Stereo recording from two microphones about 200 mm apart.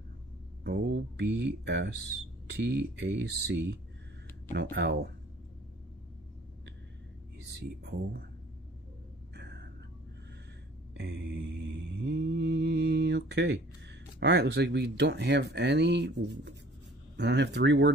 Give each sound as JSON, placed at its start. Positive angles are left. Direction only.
{"t": 0.7, "sound": "speech", "side_deg": -55}
{"t": 7.4, "sound": "speech", "side_deg": -55}
{"t": 9.3, "sound": "a sound", "side_deg": -55}
{"t": 11.0, "sound": "mantra", "side_deg": -55}
{"t": 14.2, "sound": "speech", "side_deg": -55}